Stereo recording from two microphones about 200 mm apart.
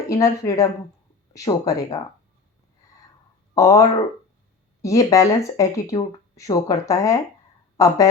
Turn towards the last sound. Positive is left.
turn(degrees=15)  # may be behind; listen again after turning